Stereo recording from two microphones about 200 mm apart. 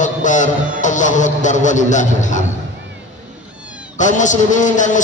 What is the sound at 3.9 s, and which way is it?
A man's voice, 40° left (ahead or behind).